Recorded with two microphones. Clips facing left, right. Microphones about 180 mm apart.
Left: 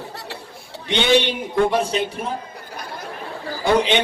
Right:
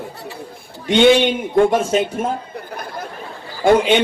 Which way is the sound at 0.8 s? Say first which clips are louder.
Right 6 dB; 45° right (ahead or behind).